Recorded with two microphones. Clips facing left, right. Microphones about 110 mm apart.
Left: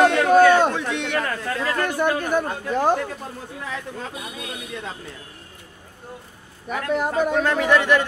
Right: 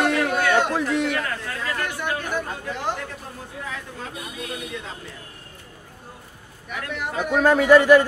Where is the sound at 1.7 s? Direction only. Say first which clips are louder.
Left 7 dB; 45° left (ahead or behind).